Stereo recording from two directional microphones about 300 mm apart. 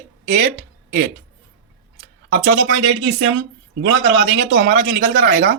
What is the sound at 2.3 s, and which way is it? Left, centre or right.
Speech, right.